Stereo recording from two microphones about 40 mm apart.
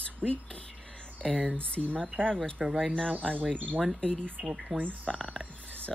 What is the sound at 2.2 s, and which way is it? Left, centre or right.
Speech, right.